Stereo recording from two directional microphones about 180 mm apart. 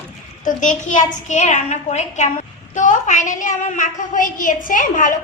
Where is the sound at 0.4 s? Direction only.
45° left (ahead or behind).